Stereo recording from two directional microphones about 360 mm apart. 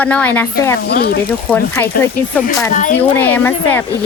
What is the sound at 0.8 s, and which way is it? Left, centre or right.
Speech, left.